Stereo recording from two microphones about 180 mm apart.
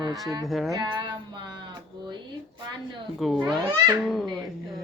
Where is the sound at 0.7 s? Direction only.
25° right (ahead or behind).